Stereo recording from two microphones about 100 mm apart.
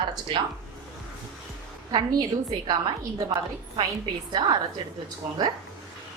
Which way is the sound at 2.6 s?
40° right (ahead or behind).